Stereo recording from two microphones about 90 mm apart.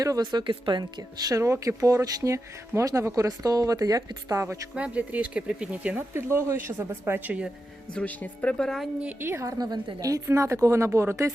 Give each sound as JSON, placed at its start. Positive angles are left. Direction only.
{"t": 0.2, "sound": "speech", "side_deg": -55}
{"t": 4.7, "sound": "speech", "side_deg": -15}
{"t": 6.3, "sound": "speech", "side_deg": -30}
{"t": 7.9, "sound": "a woman's voice", "side_deg": 15}
{"t": 9.2, "sound": "speech", "side_deg": -30}